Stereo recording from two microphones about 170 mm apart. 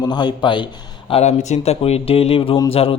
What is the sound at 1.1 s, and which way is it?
A man's voice, 40° left (ahead or behind).